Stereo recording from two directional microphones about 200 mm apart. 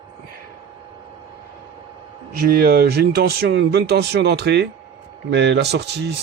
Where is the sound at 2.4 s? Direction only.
50° right (ahead or behind).